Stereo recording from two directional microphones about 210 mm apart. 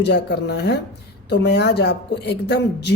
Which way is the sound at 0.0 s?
55° left (ahead or behind).